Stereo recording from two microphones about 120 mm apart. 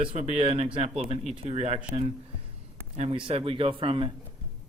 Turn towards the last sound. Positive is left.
turn(degrees=-45)  # may be behind; listen again after turning